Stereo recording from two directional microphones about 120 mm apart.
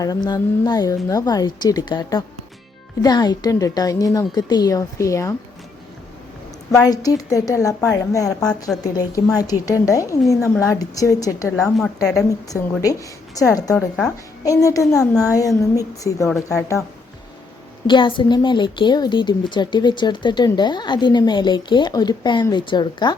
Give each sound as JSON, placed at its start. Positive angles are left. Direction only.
{"t": 0.0, "sound": "a woman's voice", "side_deg": 30}
{"t": 6.8, "sound": "a woman's voice", "side_deg": 30}
{"t": 8.8, "sound": "a woman's voice", "side_deg": 30}
{"t": 11.5, "sound": "a woman's voice", "side_deg": 5}
{"t": 12.1, "sound": "a woman's voice", "side_deg": 25}
{"t": 13.7, "sound": "a woman's voice", "side_deg": 5}
{"t": 14.4, "sound": "a woman's voice", "side_deg": 30}
{"t": 17.8, "sound": "a woman's voice", "side_deg": 40}